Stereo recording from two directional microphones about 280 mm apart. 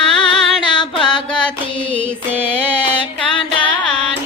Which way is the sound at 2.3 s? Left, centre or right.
Centre.